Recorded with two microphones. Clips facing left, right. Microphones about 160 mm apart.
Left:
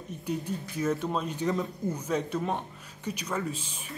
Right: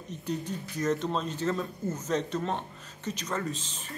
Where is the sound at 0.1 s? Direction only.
10° left (ahead or behind).